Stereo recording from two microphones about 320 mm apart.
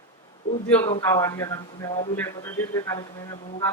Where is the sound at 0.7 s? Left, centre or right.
Centre.